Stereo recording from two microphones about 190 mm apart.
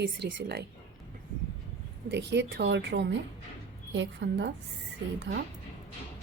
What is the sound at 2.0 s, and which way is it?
A woman's voice, 65° right (ahead or behind).